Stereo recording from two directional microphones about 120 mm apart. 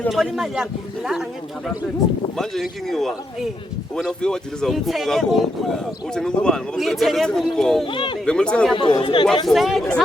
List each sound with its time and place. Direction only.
0.1 s speech: centre (ahead or behind)
2.4 s speech: centre (ahead or behind)
7.9 s speech: 45° left (ahead or behind)
8.2 s speech: 5° left (ahead or behind)
8.7 s speech: 40° left (ahead or behind)
9.5 s speech: centre (ahead or behind)